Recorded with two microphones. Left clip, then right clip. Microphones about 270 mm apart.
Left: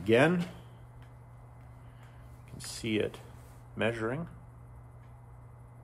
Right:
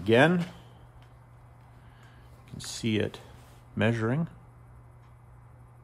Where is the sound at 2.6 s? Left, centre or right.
Right.